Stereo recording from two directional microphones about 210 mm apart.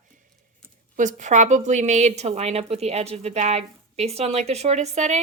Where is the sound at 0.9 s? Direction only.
35° right (ahead or behind).